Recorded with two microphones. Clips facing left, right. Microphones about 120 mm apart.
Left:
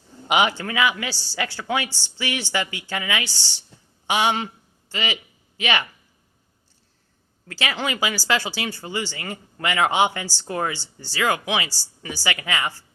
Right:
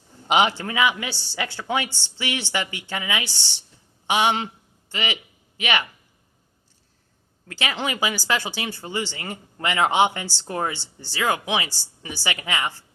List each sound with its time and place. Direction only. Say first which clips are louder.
0.3 s a man's voice: right 1 dB; 25° right (ahead or behind)
7.4 s speech: left 1 dB; 20° right (ahead or behind)